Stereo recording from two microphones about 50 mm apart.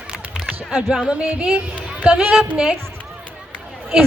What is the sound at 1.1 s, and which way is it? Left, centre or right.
Music, right.